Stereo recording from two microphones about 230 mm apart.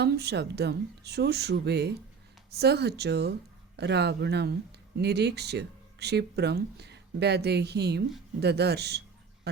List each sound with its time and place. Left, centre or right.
0.0 s speech: right